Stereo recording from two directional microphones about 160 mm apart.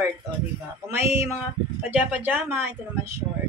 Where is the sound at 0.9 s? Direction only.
15° right (ahead or behind).